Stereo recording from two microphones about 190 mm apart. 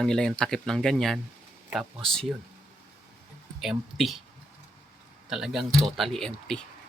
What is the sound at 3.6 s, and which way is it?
Speech, centre (ahead or behind).